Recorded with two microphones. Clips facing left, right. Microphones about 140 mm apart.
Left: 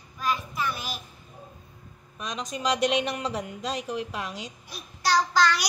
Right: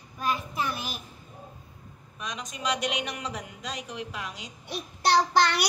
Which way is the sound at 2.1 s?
30° left (ahead or behind).